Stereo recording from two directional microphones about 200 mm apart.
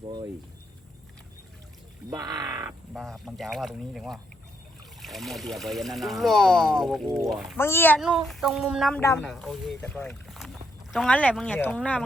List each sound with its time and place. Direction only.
2.0 s speech: 20° right (ahead or behind)
2.6 s speech: centre (ahead or behind)
7.6 s a child's voice: 10° left (ahead or behind)
8.0 s speech: centre (ahead or behind)
9.0 s a child's voice: 10° left (ahead or behind)
9.3 s speech: centre (ahead or behind)